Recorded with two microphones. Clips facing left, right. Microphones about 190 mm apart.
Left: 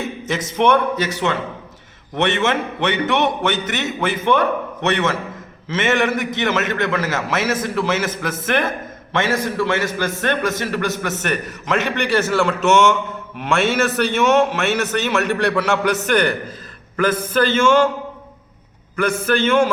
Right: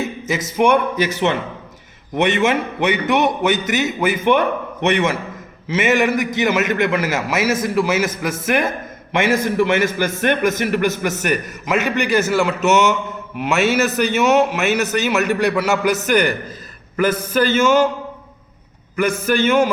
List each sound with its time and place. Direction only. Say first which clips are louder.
0.3 s a man's voice: right 1 dB; 10° right (ahead or behind)
18.9 s a man's voice: right 1 dB; 10° right (ahead or behind)